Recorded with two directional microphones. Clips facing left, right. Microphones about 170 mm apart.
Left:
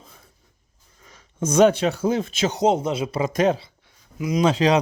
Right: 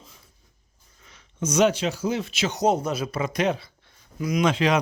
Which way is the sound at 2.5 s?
25° left (ahead or behind).